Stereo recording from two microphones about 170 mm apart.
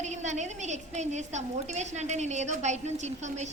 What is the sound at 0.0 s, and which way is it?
A woman's voice, 45° right (ahead or behind).